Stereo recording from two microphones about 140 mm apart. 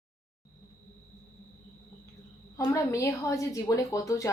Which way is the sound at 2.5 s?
20° left (ahead or behind).